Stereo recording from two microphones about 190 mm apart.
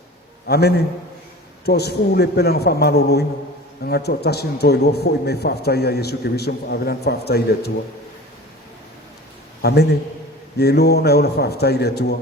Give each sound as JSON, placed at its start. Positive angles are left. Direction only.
{"t": 0.4, "sound": "a man's voice", "side_deg": 55}
{"t": 9.6, "sound": "a man's voice", "side_deg": 60}